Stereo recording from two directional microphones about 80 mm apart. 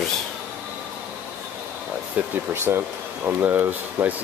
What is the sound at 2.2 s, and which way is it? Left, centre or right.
Speech, centre.